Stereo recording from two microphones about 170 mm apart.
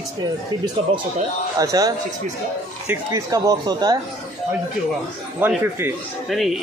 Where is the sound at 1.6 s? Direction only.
20° right (ahead or behind).